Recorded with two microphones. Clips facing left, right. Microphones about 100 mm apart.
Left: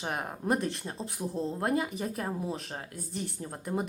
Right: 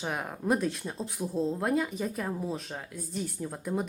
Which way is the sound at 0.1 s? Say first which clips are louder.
Right 1 dB; 5° left (ahead or behind).